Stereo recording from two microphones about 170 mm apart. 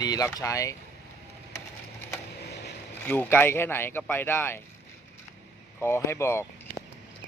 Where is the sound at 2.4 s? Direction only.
75° left (ahead or behind).